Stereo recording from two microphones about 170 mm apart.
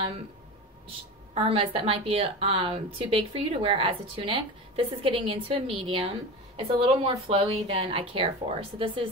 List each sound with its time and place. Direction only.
1.3 s speech: 35° right (ahead or behind)